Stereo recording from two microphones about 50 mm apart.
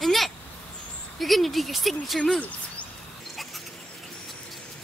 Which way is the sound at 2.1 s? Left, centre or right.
Centre.